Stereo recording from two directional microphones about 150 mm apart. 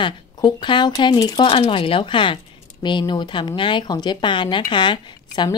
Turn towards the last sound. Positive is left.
turn(degrees=30)  # may be behind; listen again after turning